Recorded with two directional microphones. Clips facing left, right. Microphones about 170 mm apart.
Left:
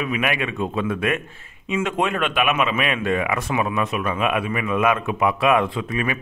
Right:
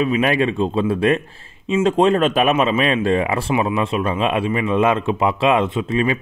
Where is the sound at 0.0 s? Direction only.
30° right (ahead or behind).